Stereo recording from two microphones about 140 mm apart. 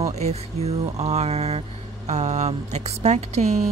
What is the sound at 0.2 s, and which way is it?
A woman's voice, 50° right (ahead or behind).